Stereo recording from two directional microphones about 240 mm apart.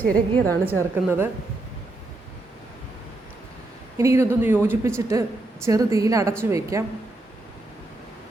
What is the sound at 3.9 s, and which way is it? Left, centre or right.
A woman's voice, centre.